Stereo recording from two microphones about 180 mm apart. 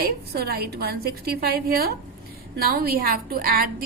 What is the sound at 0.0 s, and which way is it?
A woman's voice, 60° right (ahead or behind).